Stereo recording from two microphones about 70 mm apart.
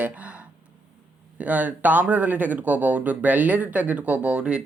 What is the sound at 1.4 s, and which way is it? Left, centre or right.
Speech, right.